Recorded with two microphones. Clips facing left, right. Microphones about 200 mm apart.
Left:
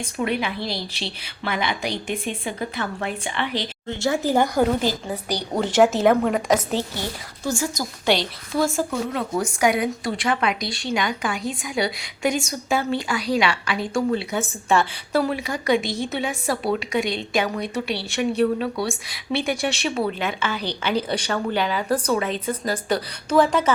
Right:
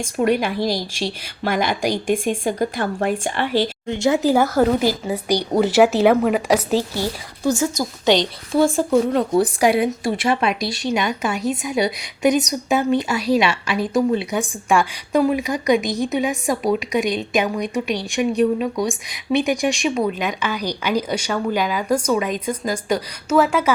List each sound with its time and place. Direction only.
0.0 s a woman's voice: 45° right (ahead or behind)
3.8 s speech: 20° right (ahead or behind)
4.4 s speech: 5° right (ahead or behind)
7.4 s a woman's voice: 20° right (ahead or behind)
7.7 s a woman's voice: 10° left (ahead or behind)
8.5 s a woman's voice: 30° right (ahead or behind); by 23.7 s 5° right (ahead or behind)